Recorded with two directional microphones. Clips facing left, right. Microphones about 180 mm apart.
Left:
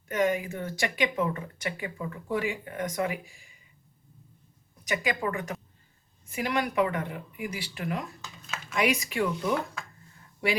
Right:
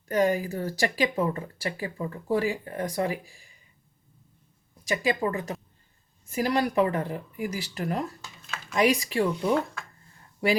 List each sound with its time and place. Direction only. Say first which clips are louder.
0.1 s speech: right 3 dB; 35° right (ahead or behind)
4.9 s a woman's voice: right 3 dB; 30° right (ahead or behind)